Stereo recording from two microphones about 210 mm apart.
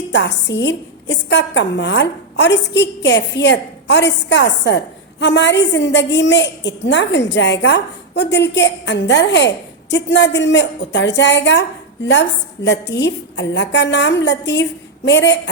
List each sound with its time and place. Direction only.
0.1 s a woman's voice: 55° left (ahead or behind)
12.6 s a woman's voice: 55° left (ahead or behind)